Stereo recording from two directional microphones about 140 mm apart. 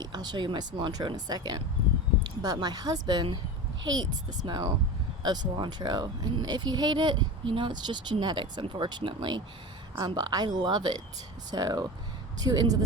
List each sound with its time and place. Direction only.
0.0 s speech: 30° right (ahead or behind)